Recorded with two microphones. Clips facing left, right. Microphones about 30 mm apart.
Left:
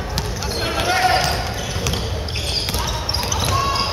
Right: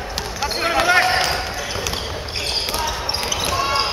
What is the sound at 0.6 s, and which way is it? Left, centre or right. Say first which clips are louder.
Basketball bounce: right 3 dB; right.